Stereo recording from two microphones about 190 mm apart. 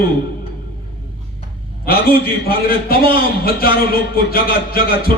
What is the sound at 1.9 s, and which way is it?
A man's voice, 55° left (ahead or behind).